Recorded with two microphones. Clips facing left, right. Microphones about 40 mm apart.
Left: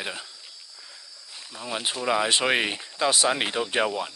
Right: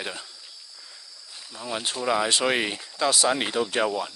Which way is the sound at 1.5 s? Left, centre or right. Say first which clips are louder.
Even; centre.